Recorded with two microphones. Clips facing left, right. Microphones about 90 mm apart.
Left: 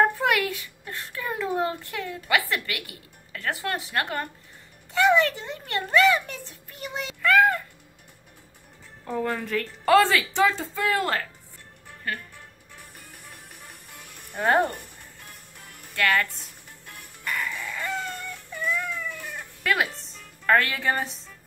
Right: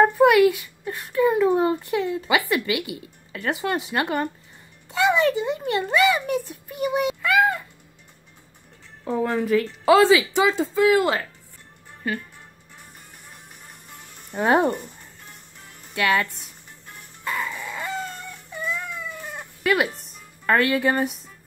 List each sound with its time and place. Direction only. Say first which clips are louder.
0.0 s a woman's voice: right 7 dB; 15° right (ahead or behind)
9.0 s a woman's voice: right 5 dB; 5° right (ahead or behind)
14.3 s a woman's voice: right 3 dB; 15° right (ahead or behind)
15.9 s speech: right 2 dB; 15° right (ahead or behind)
17.2 s a sound: right 2 dB; 20° right (ahead or behind)
19.6 s speech: right 4 dB; 5° right (ahead or behind)